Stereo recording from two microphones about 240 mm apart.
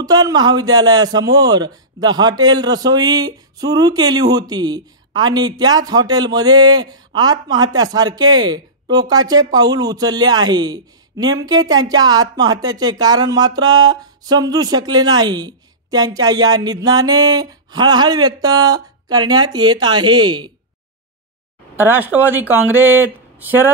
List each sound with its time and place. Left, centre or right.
0.0 s a man's voice: centre
21.7 s a man's voice: centre